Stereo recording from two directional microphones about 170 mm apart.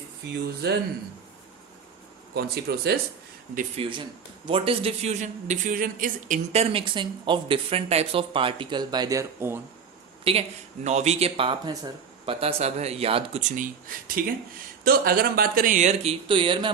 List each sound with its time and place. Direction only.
2.3 s speech: 70° right (ahead or behind)
3.8 s a man's voice: 30° right (ahead or behind)
10.3 s a man's voice: 35° right (ahead or behind)